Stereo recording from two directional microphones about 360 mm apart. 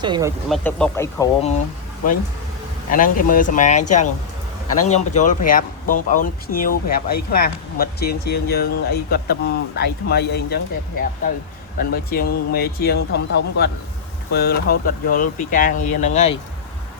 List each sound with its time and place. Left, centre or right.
0.0 s speech: centre
2.9 s speech: left
11.8 s speech: left